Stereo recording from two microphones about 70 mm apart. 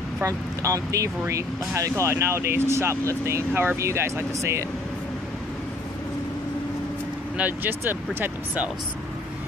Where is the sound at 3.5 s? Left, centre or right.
Right.